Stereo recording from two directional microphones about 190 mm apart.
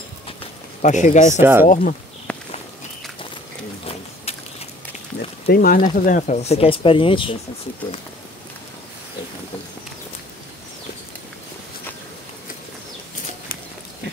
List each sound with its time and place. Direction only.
0.8 s speech: 40° left (ahead or behind)
1.4 s speech: 10° right (ahead or behind)
1.7 s speech: 45° left (ahead or behind)
2.3 s walk: 5° left (ahead or behind)
5.5 s speech: 50° left (ahead or behind); by 7.3 s 25° left (ahead or behind)